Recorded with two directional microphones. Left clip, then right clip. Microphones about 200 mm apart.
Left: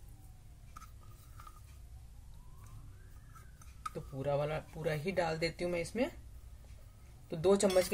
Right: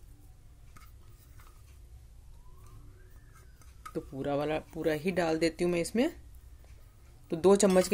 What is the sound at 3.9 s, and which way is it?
Speech, 45° right (ahead or behind).